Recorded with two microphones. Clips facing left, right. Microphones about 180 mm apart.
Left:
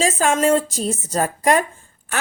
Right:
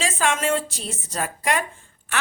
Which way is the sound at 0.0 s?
40° left (ahead or behind).